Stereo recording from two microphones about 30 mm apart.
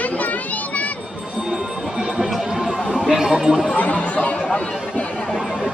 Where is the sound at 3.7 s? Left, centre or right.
Left.